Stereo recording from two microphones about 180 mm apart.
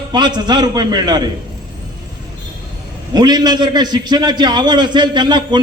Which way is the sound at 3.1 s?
25° right (ahead or behind).